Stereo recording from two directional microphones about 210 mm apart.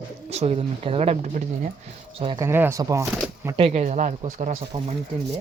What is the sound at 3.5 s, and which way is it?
Speech, 30° right (ahead or behind).